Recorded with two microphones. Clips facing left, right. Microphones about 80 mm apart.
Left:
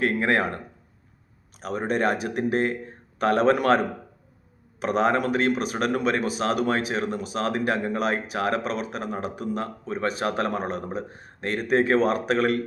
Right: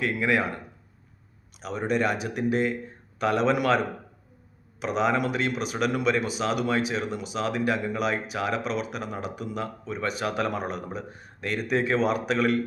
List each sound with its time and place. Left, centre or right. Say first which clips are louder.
0.0 s a man's voice: left 2 dB; left
4.8 s a man's voice: left 2 dB; left